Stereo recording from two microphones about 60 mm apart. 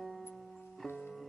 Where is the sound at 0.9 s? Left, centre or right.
Centre.